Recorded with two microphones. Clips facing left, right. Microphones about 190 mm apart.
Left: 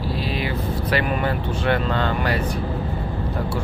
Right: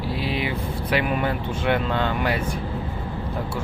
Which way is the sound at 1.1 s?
5° right (ahead or behind).